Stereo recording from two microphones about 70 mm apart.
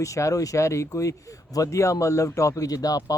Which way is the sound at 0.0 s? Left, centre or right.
Left.